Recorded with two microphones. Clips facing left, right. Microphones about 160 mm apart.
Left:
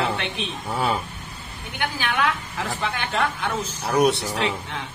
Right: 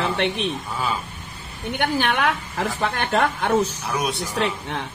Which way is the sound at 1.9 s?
55° right (ahead or behind).